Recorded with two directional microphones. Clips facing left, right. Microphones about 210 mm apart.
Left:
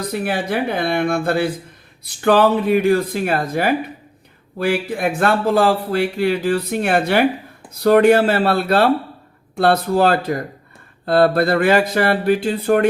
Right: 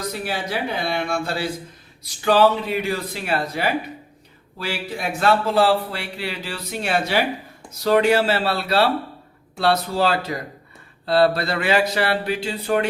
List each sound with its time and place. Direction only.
0.0 s a man's voice: 55° left (ahead or behind)